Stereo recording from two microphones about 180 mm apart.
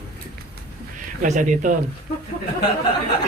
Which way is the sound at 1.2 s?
45° right (ahead or behind).